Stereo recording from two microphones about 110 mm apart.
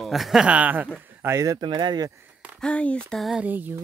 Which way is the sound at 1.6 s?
45° right (ahead or behind).